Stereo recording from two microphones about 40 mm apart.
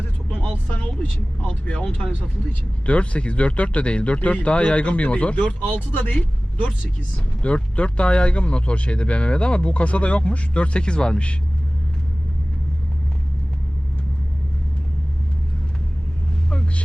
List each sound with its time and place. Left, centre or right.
0.5 s speech: left
1.5 s speech: left
5.5 s speech: left
16.5 s vehicle: left